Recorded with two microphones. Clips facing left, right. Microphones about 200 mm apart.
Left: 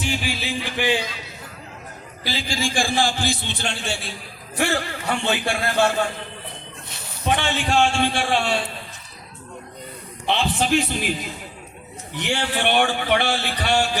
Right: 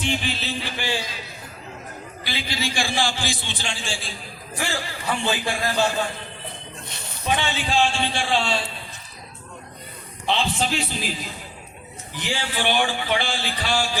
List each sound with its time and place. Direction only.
0.0 s a sound: 10° left (ahead or behind)
2.2 s a man's voice: 45° left (ahead or behind); by 5.9 s 60° left (ahead or behind)
7.3 s speech: 60° left (ahead or behind)
10.2 s speech: 55° left (ahead or behind)
12.1 s speech: 65° left (ahead or behind)